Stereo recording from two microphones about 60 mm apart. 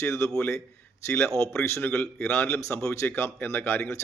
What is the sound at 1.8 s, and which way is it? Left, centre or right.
Speech, left.